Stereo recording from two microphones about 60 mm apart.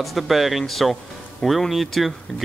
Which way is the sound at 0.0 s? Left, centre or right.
Centre.